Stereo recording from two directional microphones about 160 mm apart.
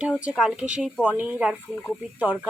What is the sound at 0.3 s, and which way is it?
Speech, 5° right (ahead or behind).